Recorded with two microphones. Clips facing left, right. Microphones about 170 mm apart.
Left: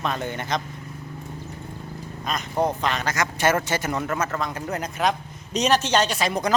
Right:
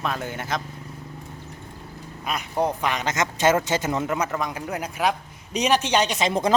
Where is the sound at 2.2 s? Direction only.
10° right (ahead or behind).